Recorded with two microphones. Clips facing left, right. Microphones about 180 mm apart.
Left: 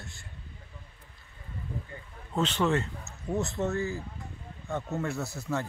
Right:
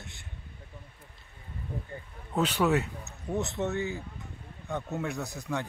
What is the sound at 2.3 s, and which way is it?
Speech, 10° right (ahead or behind).